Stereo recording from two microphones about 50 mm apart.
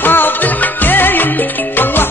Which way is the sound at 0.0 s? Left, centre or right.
Left.